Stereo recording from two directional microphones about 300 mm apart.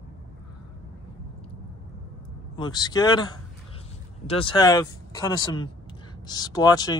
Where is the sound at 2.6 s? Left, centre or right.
Centre.